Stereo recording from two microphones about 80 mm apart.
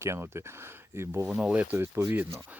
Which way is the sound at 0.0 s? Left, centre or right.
Right.